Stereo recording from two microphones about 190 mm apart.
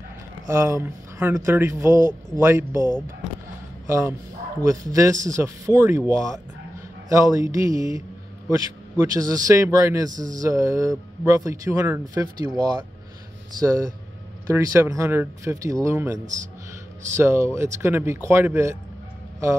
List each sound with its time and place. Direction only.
0.5 s speech: 15° right (ahead or behind)
9.1 s a man's voice: 20° right (ahead or behind)
17.2 s speech: 15° right (ahead or behind)